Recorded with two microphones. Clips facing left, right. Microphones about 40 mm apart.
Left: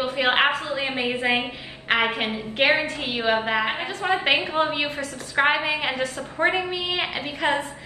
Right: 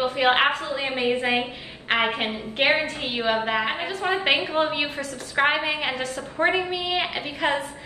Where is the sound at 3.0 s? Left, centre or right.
Left.